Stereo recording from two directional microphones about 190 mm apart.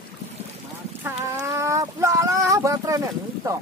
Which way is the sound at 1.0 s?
15° right (ahead or behind).